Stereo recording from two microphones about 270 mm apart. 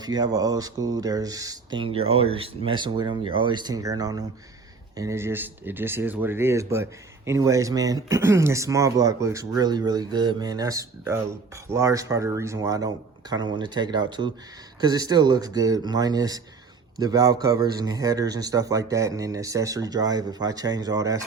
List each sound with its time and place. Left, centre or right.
0.0 s speech: centre